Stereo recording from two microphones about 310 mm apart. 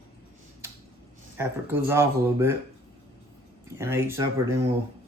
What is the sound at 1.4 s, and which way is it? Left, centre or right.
Speech, centre.